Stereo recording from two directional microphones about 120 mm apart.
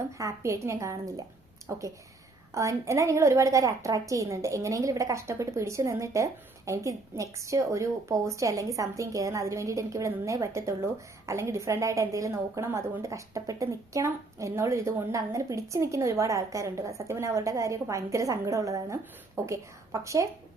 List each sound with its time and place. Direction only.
0.2 s a woman's voice: 25° right (ahead or behind)